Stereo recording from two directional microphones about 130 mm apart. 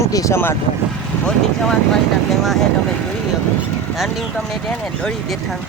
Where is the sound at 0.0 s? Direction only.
25° left (ahead or behind).